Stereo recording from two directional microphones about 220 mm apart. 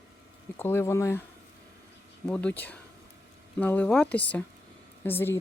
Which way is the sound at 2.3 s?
5° left (ahead or behind).